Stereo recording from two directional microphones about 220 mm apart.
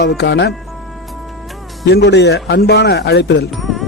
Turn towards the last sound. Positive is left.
turn(degrees=0)  # may be behind; listen again after turning